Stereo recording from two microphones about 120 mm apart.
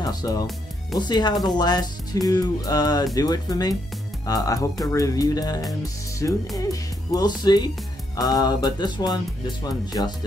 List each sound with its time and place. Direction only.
0.0 s speech: 30° left (ahead or behind)